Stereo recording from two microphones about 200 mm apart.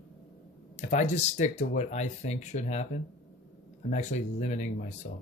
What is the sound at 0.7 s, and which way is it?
Speech, 40° left (ahead or behind).